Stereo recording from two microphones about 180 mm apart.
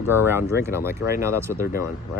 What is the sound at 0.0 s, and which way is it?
Speech, 15° right (ahead or behind).